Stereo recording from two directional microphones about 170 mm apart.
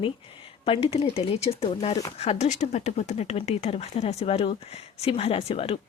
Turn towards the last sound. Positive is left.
turn(degrees=35)  # may be behind; listen again after turning